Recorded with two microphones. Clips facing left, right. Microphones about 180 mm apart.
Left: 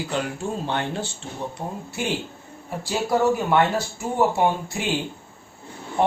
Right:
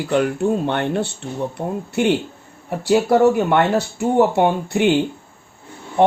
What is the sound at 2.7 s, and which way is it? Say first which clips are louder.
Speech: right 8 dB; 65° right (ahead or behind).